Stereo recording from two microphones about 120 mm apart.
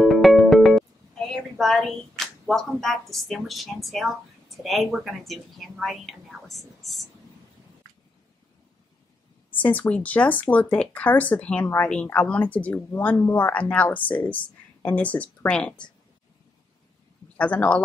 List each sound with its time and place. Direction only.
0.0 s music: centre (ahead or behind)
1.3 s speech: centre (ahead or behind)
9.6 s speech: 15° left (ahead or behind)
17.4 s speech: 10° left (ahead or behind)